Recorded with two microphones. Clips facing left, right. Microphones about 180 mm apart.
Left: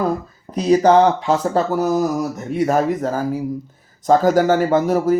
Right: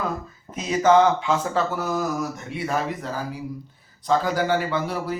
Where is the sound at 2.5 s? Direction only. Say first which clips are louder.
Left 11 dB; 45° left (ahead or behind).